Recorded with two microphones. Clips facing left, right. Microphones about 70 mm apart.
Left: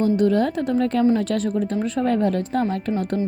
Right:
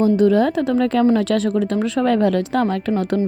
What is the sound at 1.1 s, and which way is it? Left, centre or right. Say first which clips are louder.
A woman's voice: right 4 dB; right.